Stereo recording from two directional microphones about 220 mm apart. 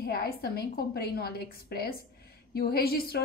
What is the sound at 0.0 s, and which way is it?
A woman's voice, 45° left (ahead or behind).